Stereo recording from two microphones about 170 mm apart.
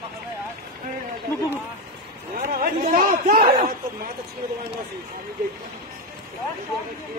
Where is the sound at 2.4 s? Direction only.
55° right (ahead or behind).